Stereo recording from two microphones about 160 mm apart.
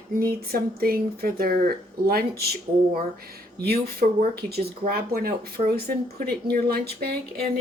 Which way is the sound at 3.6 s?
75° right (ahead or behind).